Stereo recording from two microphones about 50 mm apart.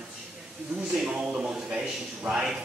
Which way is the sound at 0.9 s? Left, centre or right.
Centre.